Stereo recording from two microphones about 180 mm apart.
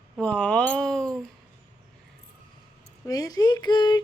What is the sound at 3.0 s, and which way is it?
Speech, 20° left (ahead or behind).